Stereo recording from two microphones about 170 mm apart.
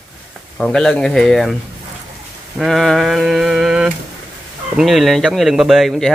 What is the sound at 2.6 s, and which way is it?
Speech, centre (ahead or behind).